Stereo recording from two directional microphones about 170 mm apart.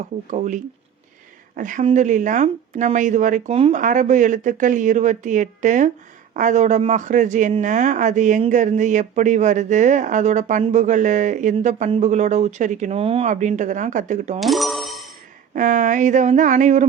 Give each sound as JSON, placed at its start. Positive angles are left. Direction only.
{"t": 0.3, "sound": "a man's voice", "side_deg": -45}
{"t": 13.2, "sound": "a man's voice", "side_deg": -45}
{"t": 14.3, "sound": "coin", "side_deg": 0}
{"t": 15.5, "sound": "a man's voice", "side_deg": -50}